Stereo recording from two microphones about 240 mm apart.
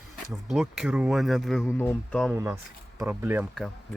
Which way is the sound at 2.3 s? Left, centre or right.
Centre.